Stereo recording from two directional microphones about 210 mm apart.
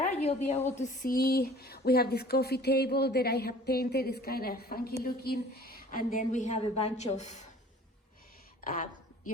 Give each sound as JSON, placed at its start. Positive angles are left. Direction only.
{"t": 0.0, "sound": "a sound", "side_deg": 30}
{"t": 0.8, "sound": "speech", "side_deg": 40}
{"t": 8.6, "sound": "a woman's voice", "side_deg": 40}